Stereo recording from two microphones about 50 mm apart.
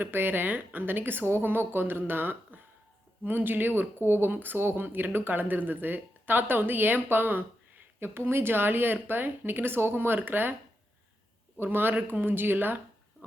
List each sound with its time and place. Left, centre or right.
0.0 s a woman's voice: right
7.9 s speech: right
11.6 s speech: right